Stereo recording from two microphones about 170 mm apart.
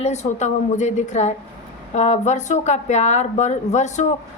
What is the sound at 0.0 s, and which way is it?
Speech, 40° left (ahead or behind).